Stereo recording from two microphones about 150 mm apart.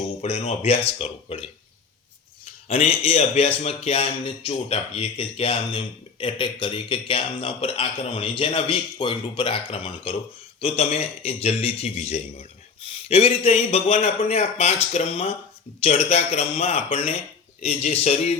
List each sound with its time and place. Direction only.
0.2 s a man's voice: 45° left (ahead or behind)
2.6 s a man's voice: 40° left (ahead or behind)